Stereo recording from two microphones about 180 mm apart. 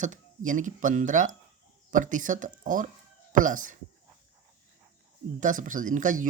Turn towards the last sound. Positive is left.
turn(degrees=-45)  # may be behind; listen again after turning